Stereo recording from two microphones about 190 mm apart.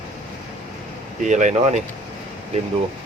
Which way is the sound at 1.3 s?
40° right (ahead or behind).